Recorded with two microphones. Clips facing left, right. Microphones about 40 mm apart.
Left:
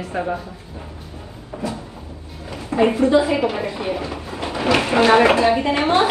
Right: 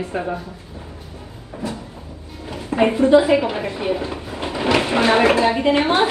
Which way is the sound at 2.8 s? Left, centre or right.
Right.